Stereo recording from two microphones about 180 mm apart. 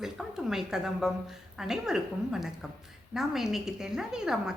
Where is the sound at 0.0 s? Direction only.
Centre (ahead or behind).